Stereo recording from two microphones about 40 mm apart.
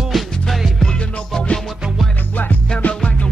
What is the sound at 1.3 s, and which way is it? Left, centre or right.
Music, left.